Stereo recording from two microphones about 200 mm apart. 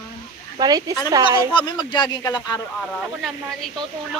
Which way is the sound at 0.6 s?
20° right (ahead or behind).